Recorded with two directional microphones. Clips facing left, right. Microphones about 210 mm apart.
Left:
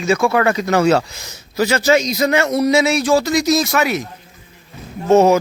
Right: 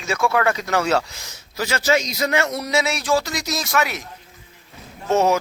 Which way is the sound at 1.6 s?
20° left (ahead or behind).